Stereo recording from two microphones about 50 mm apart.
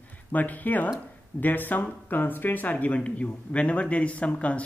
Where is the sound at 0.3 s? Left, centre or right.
Left.